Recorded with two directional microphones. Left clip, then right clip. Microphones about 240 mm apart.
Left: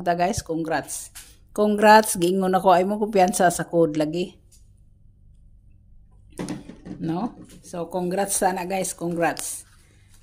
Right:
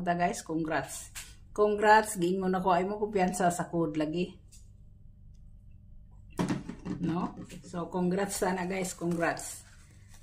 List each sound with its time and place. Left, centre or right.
0.0 s speech: left
6.3 s door: left
7.0 s speech: left